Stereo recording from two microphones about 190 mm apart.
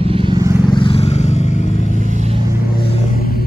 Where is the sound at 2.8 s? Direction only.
50° left (ahead or behind).